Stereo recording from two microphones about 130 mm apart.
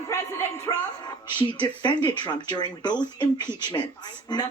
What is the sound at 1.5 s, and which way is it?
Speech, 40° left (ahead or behind).